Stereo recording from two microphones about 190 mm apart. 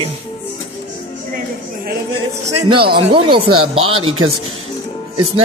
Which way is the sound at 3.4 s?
90° right.